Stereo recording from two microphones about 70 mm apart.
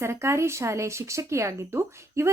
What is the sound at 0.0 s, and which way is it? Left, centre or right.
Speech, right.